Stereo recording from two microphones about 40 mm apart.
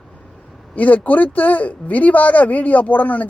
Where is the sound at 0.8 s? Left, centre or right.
Left.